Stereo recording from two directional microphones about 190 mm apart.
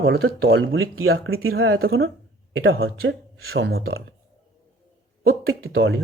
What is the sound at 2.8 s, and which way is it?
Speech, 75° right (ahead or behind).